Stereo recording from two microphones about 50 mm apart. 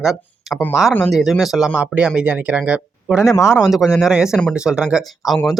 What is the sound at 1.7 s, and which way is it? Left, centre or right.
Speech, right.